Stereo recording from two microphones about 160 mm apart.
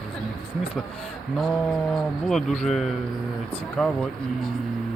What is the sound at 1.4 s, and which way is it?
Speech, centre (ahead or behind).